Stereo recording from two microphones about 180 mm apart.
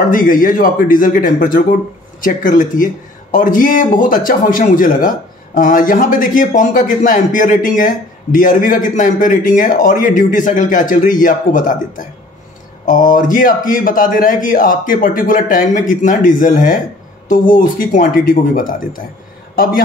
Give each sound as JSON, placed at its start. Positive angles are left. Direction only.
{"t": 0.1, "sound": "a man's voice", "side_deg": 50}